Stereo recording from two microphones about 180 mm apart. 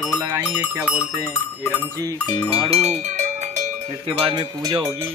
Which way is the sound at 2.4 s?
35° right (ahead or behind).